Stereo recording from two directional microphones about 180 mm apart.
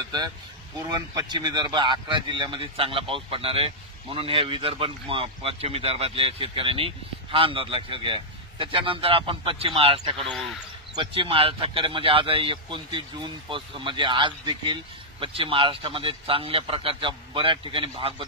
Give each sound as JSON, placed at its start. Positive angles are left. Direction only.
{"t": 1.1, "sound": "speech", "side_deg": -20}